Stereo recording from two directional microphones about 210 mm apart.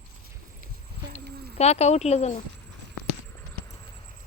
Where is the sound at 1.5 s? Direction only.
30° left (ahead or behind).